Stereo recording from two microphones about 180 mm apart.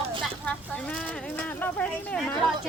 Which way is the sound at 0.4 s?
5° left (ahead or behind).